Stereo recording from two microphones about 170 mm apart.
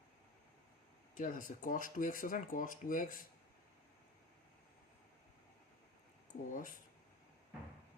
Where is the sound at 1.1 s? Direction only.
50° left (ahead or behind).